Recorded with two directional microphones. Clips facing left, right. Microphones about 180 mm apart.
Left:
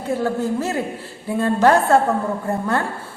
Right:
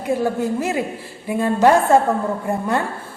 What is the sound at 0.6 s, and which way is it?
Speech, 15° right (ahead or behind).